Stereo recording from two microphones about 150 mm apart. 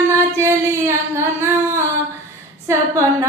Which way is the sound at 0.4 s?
15° right (ahead or behind).